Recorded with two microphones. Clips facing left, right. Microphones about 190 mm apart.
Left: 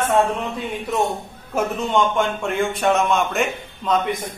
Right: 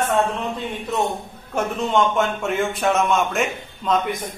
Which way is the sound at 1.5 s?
Centre (ahead or behind).